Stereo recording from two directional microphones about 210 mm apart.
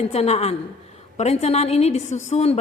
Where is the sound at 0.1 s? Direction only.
30° left (ahead or behind).